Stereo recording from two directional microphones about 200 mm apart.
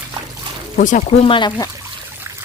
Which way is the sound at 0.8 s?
40° left (ahead or behind).